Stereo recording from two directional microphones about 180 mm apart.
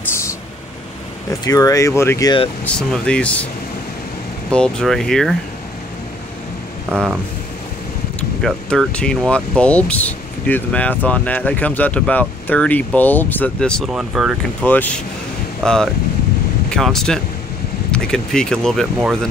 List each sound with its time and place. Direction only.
1.4 s speech: 20° left (ahead or behind)
2.6 s speech: 5° left (ahead or behind)
4.5 s speech: 5° left (ahead or behind)
8.2 s speech: 5° left (ahead or behind)
14.6 s speech: 10° left (ahead or behind)